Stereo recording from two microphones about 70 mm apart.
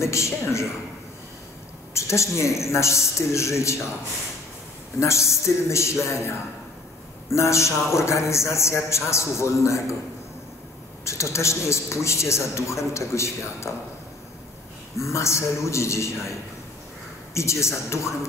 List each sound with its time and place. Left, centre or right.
0.0 s speech: left
2.0 s speech: left
5.0 s speech: left
11.1 s speech: left
15.0 s speech: left